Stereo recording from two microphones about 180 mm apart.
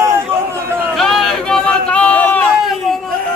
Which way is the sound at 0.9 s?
Centre (ahead or behind).